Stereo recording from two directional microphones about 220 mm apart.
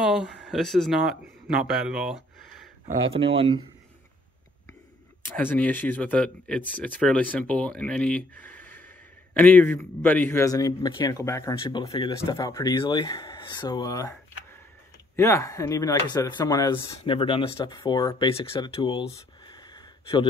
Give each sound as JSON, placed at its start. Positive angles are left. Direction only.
{"t": 0.0, "sound": "speech", "side_deg": -5}
{"t": 3.0, "sound": "speech", "side_deg": -25}
{"t": 5.3, "sound": "a man's voice", "side_deg": 5}
{"t": 15.1, "sound": "speech", "side_deg": 15}
{"t": 19.4, "sound": "a sound", "side_deg": 20}